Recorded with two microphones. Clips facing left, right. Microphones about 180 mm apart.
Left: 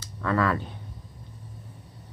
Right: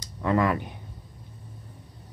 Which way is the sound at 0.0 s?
20° right (ahead or behind).